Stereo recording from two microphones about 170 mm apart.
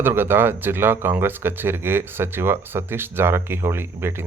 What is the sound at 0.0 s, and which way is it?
Speech, 15° right (ahead or behind).